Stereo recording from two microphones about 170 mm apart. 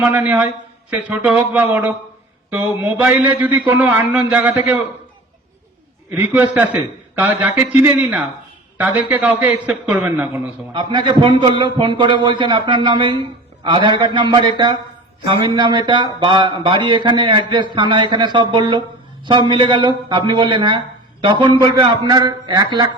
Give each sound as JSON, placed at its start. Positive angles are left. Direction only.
{"t": 0.0, "sound": "a man's voice", "side_deg": -10}
{"t": 6.1, "sound": "a man's voice", "side_deg": -10}
{"t": 10.8, "sound": "speech", "side_deg": -25}